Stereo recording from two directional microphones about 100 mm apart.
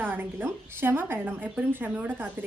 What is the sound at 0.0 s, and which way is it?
A woman's voice, 20° right (ahead or behind).